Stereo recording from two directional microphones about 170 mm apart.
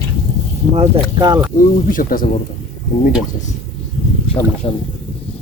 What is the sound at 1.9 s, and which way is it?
Speech, 55° left (ahead or behind).